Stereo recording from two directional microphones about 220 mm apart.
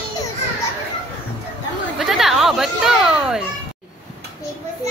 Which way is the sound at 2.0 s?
Centre (ahead or behind).